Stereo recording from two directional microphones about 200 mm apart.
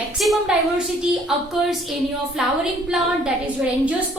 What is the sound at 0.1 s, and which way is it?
Speech, centre (ahead or behind).